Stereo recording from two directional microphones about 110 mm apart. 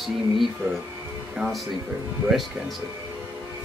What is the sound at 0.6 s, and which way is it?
Speech, 20° right (ahead or behind).